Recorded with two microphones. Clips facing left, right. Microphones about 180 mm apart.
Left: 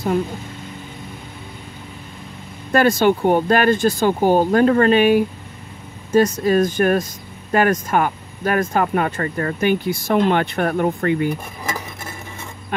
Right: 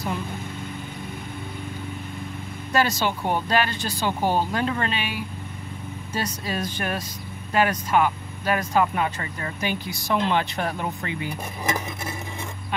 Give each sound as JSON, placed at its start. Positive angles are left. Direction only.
{"t": 2.7, "sound": "speech", "side_deg": 55}